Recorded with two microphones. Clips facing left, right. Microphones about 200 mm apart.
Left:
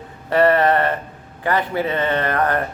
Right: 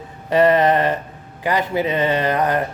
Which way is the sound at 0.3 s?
15° right (ahead or behind).